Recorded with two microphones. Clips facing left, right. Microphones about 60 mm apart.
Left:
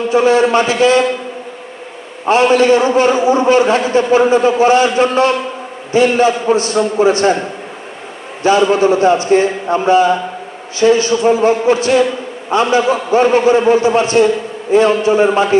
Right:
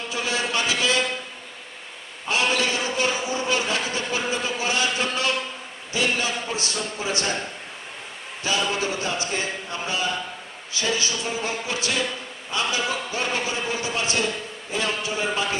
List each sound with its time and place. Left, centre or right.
0.1 s a man's voice: left
2.2 s a man's voice: left
8.4 s a man's voice: left
13.2 s a man's voice: left